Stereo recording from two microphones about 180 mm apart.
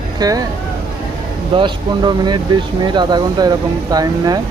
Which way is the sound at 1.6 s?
25° right (ahead or behind).